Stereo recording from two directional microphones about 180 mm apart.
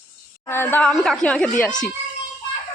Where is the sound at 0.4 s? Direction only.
15° left (ahead or behind).